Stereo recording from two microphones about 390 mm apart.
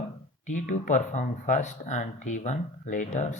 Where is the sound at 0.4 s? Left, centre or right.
Centre.